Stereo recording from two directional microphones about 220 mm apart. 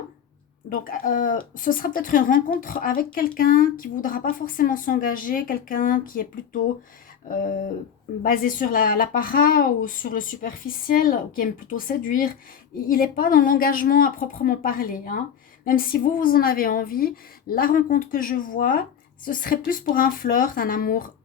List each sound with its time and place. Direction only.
0.7 s speech: 40° left (ahead or behind)